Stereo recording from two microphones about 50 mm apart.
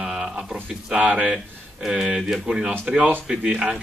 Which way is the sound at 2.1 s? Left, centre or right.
Centre.